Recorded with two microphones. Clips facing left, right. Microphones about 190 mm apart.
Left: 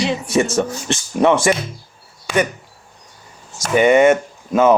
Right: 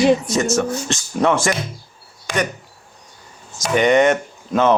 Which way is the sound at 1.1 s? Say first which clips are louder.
Left 3 dB; 10° left (ahead or behind).